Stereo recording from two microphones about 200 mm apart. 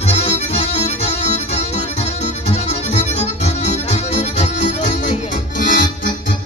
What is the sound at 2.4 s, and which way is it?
Accordion, 35° left (ahead or behind).